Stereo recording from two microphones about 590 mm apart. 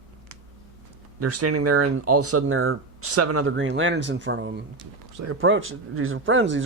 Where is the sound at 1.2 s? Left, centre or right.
Right.